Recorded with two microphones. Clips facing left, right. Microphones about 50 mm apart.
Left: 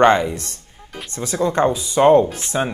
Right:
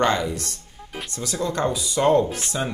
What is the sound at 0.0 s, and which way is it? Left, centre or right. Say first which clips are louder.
Speech: left 7 dB; left.